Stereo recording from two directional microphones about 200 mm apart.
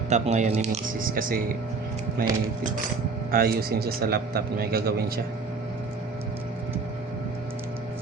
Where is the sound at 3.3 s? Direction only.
50° right (ahead or behind).